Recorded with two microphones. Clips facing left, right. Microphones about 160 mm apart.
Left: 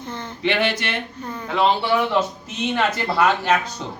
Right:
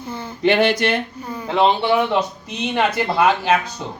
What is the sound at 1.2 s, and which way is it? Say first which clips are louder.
Speech: right 1 dB; 10° right (ahead or behind).